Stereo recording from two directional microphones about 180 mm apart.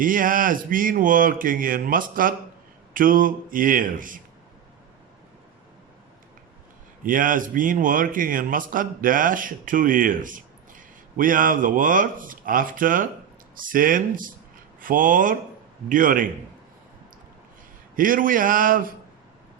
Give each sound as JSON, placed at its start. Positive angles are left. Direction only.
{"t": 0.0, "sound": "a man's voice", "side_deg": -50}
{"t": 7.0, "sound": "a man's voice", "side_deg": -50}
{"t": 17.9, "sound": "a man's voice", "side_deg": -50}